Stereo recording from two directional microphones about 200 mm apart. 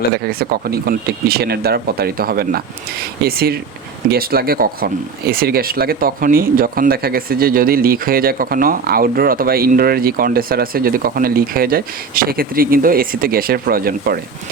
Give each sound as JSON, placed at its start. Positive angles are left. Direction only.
{"t": 0.1, "sound": "speech", "side_deg": -50}